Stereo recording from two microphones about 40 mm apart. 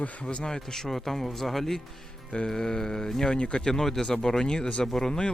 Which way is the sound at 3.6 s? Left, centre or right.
Centre.